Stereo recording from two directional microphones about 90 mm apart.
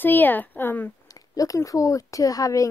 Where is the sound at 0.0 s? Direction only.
20° left (ahead or behind).